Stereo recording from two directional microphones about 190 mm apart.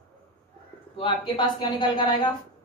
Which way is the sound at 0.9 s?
25° left (ahead or behind).